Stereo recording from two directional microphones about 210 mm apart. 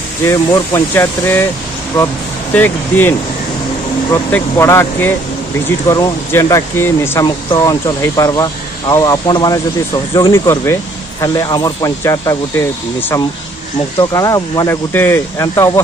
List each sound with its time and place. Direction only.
0.3 s speech: 15° left (ahead or behind)